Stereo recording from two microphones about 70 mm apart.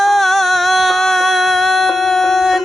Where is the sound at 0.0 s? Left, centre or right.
Centre.